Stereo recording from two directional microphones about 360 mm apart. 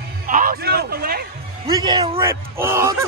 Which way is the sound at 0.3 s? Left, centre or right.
Right.